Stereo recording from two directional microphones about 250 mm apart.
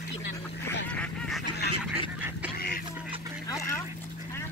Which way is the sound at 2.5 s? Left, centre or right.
Left.